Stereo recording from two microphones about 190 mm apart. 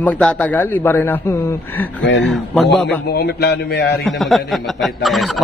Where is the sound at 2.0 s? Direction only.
70° left (ahead or behind).